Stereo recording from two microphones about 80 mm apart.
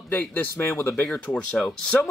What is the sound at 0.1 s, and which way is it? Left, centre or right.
Speech, left.